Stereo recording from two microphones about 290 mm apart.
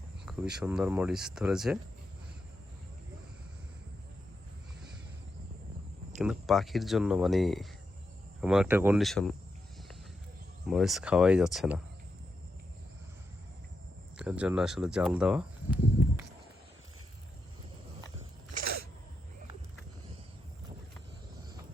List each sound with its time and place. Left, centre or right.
0.3 s speech: centre
6.2 s speech: centre
10.7 s speech: centre
14.2 s speech: centre
18.5 s a sound: right